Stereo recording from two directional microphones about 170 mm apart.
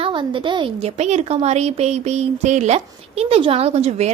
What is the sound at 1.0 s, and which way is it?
Speech, 40° right (ahead or behind).